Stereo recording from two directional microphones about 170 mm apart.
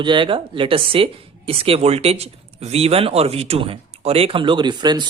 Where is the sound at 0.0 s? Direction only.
30° right (ahead or behind).